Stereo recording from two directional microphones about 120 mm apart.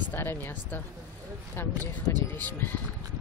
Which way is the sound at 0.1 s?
20° left (ahead or behind).